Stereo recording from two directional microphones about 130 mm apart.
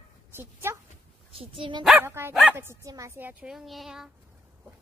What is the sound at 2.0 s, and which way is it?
Speech, 20° right (ahead or behind).